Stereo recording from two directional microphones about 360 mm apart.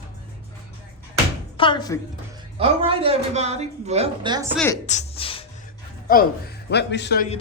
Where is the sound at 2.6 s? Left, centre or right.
Centre.